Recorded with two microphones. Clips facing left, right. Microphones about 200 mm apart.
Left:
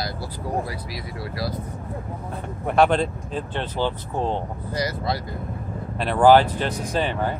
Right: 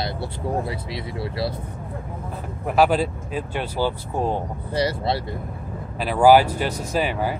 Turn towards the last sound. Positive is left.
turn(degrees=-10)  # may be behind; listen again after turning